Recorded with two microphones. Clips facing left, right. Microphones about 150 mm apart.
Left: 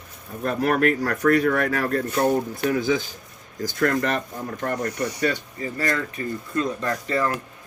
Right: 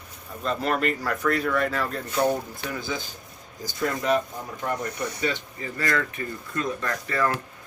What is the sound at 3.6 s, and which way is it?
Speech, 75° left (ahead or behind).